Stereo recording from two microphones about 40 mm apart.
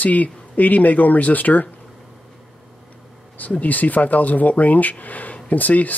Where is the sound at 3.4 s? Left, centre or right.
Left.